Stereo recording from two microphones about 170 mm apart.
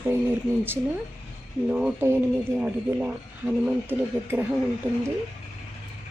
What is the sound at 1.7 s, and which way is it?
Speech, 5° right (ahead or behind).